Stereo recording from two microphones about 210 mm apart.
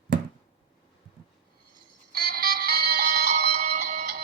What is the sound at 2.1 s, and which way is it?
Music, 45° right (ahead or behind).